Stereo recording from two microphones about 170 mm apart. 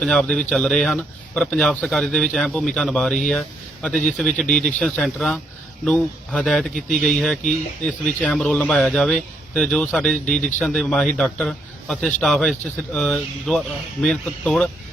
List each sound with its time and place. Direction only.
0.0 s speech: 5° left (ahead or behind)